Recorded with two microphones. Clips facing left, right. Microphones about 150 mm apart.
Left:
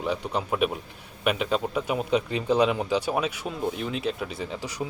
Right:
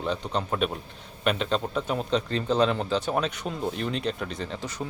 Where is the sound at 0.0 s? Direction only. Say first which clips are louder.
Left 1 dB; 10° left (ahead or behind).